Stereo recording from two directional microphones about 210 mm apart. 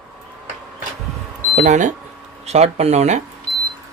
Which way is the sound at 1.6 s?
35° right (ahead or behind).